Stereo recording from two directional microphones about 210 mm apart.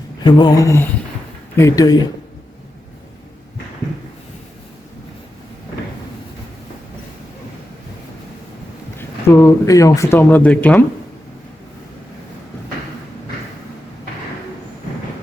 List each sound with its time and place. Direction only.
0.3 s speech: 20° left (ahead or behind)
9.0 s speech: 15° left (ahead or behind)